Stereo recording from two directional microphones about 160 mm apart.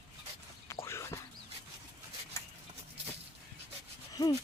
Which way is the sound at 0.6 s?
15° left (ahead or behind).